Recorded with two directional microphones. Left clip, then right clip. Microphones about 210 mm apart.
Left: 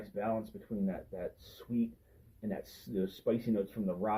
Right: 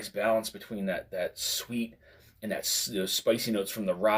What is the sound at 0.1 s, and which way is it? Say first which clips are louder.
Speech: right 8 dB; 15° right (ahead or behind).